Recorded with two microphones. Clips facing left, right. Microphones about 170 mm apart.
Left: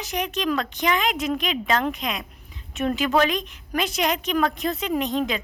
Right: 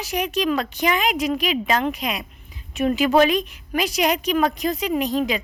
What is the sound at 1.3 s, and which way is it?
A woman's voice, 10° right (ahead or behind).